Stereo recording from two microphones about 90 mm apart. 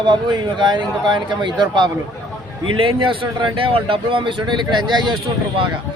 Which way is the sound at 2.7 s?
75° right (ahead or behind).